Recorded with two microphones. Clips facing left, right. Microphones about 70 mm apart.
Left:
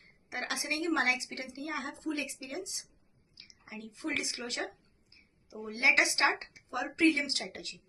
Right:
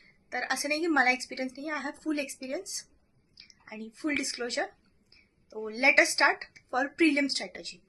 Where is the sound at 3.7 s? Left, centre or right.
Right.